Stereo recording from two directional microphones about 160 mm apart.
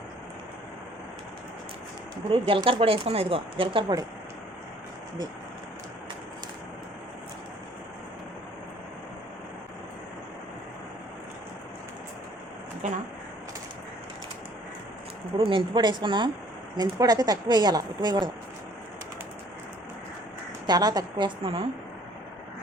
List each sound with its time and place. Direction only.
2.3 s speech: 35° right (ahead or behind)
15.4 s speech: 35° right (ahead or behind)
20.7 s speech: 25° right (ahead or behind)